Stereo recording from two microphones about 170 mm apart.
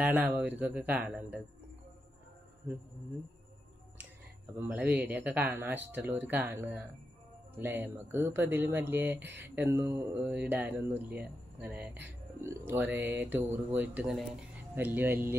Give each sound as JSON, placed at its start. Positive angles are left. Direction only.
{"t": 0.0, "sound": "speech", "side_deg": -10}
{"t": 4.6, "sound": "speech", "side_deg": -10}